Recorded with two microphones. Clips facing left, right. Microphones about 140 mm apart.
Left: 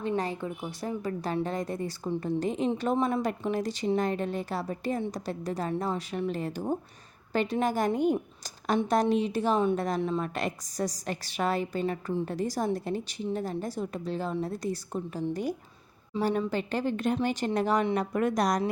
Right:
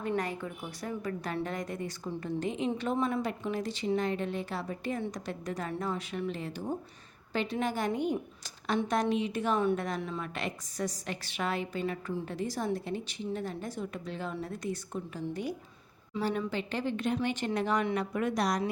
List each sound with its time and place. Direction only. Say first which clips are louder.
0.2 s a woman's voice: left 3 dB; 25° left (ahead or behind)
16.5 s a woman's voice: left 4 dB; 45° left (ahead or behind)